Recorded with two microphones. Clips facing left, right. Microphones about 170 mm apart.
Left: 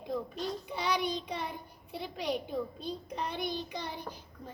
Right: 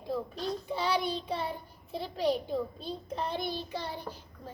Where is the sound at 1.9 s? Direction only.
15° left (ahead or behind).